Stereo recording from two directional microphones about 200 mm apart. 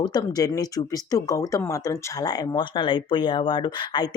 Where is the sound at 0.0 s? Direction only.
20° left (ahead or behind).